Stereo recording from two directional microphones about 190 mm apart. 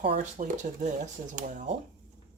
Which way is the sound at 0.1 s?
40° right (ahead or behind).